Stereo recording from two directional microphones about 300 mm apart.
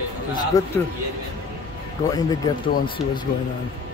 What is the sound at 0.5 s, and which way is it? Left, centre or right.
Speech, centre.